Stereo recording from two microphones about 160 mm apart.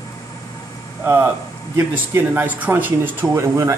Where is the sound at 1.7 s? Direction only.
15° right (ahead or behind).